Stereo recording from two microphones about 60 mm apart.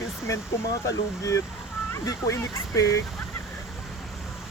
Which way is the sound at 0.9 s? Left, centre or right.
Left.